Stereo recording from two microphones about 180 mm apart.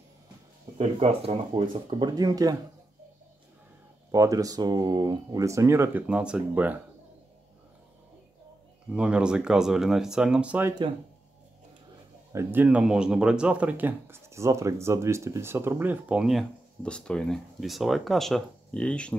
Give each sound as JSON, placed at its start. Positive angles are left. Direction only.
{"t": 0.7, "sound": "speech", "side_deg": -35}
{"t": 4.1, "sound": "speech", "side_deg": -20}
{"t": 8.9, "sound": "speech", "side_deg": -5}
{"t": 12.3, "sound": "speech", "side_deg": -15}